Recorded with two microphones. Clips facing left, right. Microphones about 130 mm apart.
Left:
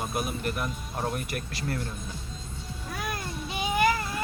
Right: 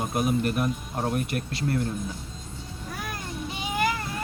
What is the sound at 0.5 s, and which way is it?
A man's voice, 35° right (ahead or behind).